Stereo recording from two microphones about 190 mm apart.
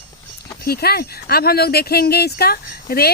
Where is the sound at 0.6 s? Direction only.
55° left (ahead or behind).